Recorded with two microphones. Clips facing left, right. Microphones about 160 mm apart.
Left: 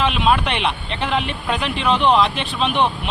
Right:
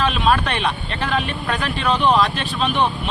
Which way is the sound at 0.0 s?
20° left (ahead or behind).